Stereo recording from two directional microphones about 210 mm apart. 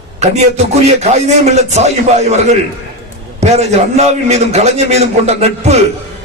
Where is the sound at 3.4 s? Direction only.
30° right (ahead or behind).